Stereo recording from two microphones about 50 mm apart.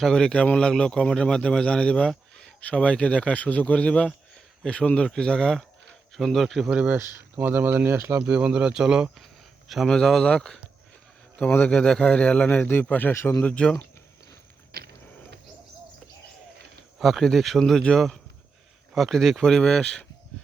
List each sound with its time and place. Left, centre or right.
0.1 s speech: centre
6.1 s speech: centre
6.7 s speech: right
6.9 s speech: right
7.9 s speech: right
8.2 s speech: right
9.8 s speech: centre
11.7 s speech: centre
12.9 s speech: left
13.4 s speech: left
17.0 s speech: centre